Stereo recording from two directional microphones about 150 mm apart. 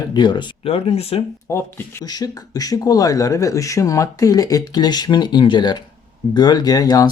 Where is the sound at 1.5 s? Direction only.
15° left (ahead or behind).